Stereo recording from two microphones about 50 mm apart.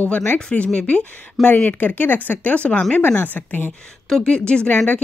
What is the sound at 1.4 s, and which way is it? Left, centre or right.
Speech, left.